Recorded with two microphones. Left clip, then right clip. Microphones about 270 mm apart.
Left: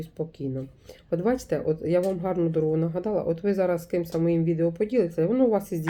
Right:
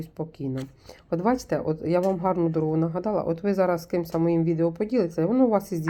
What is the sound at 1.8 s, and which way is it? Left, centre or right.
Speech, centre.